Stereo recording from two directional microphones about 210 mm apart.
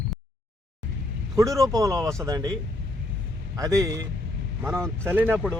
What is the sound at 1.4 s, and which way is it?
Speech, 15° right (ahead or behind).